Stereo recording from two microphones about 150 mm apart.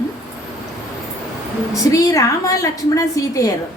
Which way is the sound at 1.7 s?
20° left (ahead or behind).